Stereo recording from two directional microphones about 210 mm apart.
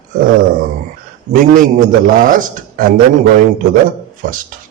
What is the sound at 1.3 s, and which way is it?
A man's voice, 40° right (ahead or behind).